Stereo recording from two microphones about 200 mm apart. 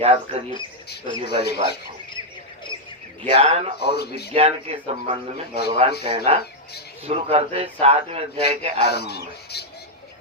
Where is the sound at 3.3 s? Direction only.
25° right (ahead or behind).